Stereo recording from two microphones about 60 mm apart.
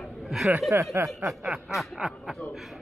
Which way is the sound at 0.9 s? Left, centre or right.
Right.